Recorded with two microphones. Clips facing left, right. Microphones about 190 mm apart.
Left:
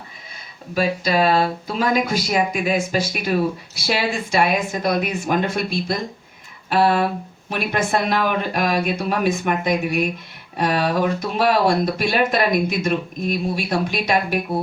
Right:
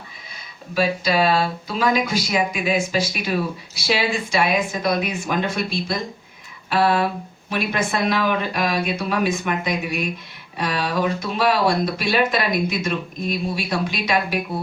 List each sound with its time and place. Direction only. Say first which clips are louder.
0.7 s speech: even; 45° left (ahead or behind)